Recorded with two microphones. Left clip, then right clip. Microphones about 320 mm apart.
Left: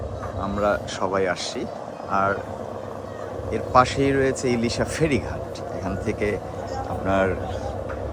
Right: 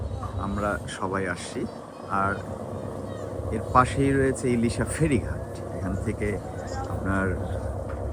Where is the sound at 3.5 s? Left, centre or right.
Centre.